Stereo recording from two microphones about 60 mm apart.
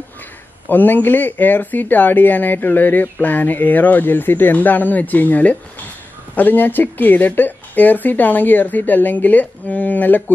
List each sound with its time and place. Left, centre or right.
0.7 s speech: left